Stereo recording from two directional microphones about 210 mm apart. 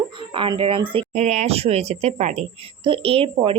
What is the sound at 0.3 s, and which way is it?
A woman's voice, 25° right (ahead or behind).